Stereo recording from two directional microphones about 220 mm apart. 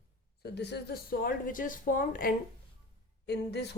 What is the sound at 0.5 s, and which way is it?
Speech, 50° left (ahead or behind).